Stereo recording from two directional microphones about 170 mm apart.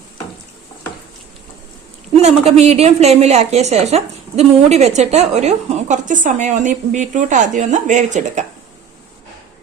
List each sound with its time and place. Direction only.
2.2 s a woman's voice: 40° right (ahead or behind)